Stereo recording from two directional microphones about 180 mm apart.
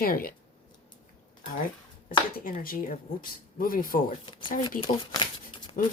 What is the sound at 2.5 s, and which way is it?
Speech, 50° left (ahead or behind).